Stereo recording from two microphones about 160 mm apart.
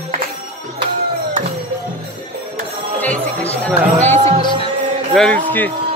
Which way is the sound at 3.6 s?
10° left (ahead or behind).